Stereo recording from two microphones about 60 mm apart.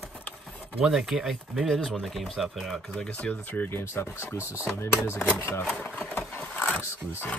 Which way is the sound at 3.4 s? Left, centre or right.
Left.